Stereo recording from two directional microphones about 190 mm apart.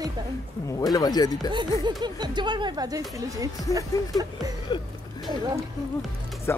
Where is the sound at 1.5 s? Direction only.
25° right (ahead or behind).